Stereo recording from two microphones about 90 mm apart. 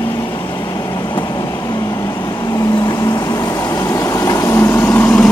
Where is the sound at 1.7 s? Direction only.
40° left (ahead or behind).